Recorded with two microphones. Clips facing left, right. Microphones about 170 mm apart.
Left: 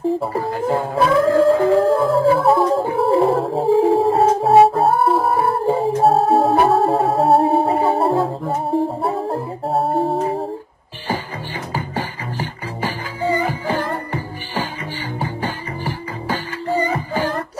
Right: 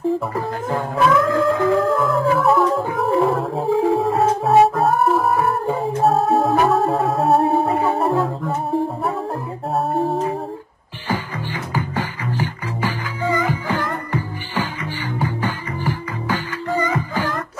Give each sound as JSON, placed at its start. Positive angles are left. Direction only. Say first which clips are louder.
{"t": 0.2, "sound": "howl", "louder": "left 3 dB", "side_deg": 30}
{"t": 12.8, "sound": "music", "louder": "left 1 dB", "side_deg": 30}